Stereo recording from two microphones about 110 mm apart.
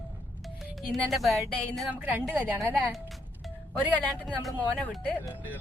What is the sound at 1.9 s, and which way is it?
A woman's voice, 15° right (ahead or behind).